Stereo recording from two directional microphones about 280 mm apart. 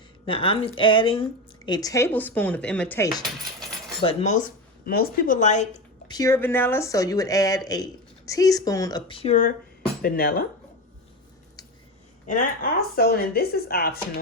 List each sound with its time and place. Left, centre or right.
0.3 s speech: centre
4.0 s speech: left
6.1 s speech: centre; by 10.4 s left
12.2 s speech: left